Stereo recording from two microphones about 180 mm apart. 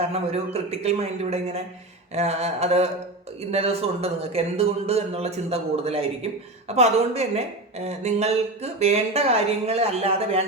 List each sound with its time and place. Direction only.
0.0 s a man's voice: 35° right (ahead or behind)